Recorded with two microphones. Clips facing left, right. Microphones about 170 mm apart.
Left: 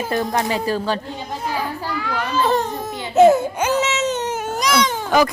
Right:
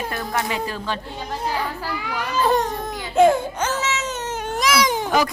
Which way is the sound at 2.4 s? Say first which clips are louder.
Right 1 dB; centre (ahead or behind).